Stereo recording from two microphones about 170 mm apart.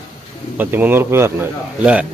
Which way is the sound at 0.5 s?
10° right (ahead or behind).